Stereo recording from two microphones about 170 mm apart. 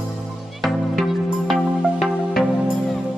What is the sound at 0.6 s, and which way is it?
Music, centre (ahead or behind).